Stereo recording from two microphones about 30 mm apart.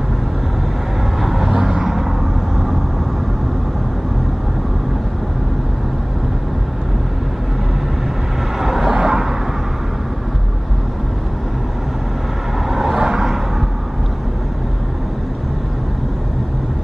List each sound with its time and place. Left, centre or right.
1.2 s vehicle: centre
1.6 s vehicle: centre
8.5 s vehicle: centre
8.9 s vehicle: centre
12.6 s vehicle: centre
12.9 s vehicle: right